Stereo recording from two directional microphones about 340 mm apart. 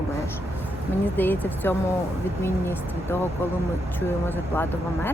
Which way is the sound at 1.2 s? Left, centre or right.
Centre.